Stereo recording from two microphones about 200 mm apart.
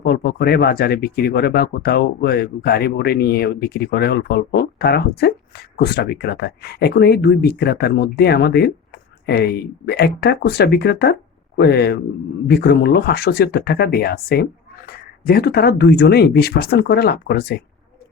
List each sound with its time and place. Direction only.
0.0 s speech: 50° left (ahead or behind)